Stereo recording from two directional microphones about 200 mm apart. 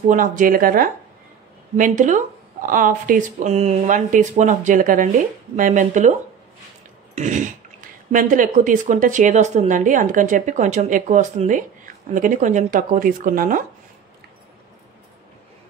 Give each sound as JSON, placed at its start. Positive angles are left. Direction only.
{"t": 0.1, "sound": "speech", "side_deg": -40}
{"t": 7.2, "sound": "speech", "side_deg": -40}